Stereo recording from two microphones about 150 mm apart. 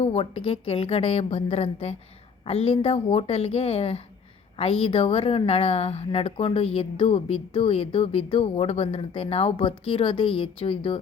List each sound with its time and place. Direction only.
0.0 s a woman's voice: 45° left (ahead or behind)